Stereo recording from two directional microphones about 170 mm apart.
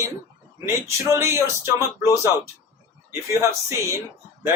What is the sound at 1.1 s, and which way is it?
Speech, 15° right (ahead or behind).